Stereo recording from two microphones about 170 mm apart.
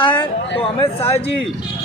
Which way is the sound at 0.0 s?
30° left (ahead or behind).